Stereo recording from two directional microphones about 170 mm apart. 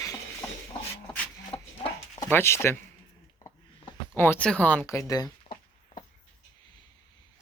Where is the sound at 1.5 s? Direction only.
30° left (ahead or behind).